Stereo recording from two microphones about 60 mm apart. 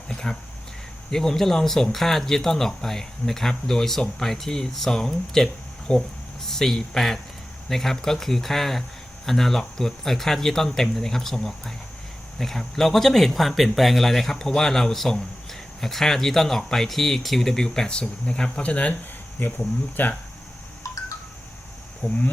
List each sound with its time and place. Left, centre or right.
0.1 s a sound: centre
1.1 s speech: centre
19.4 s speech: left
22.0 s speech: left